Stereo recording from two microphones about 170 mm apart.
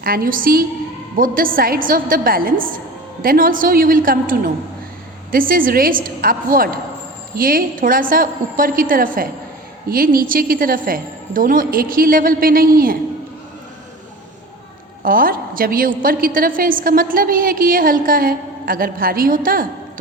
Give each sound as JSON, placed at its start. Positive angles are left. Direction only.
{"t": 0.0, "sound": "a woman's voice", "side_deg": -60}
{"t": 15.0, "sound": "a woman's voice", "side_deg": -55}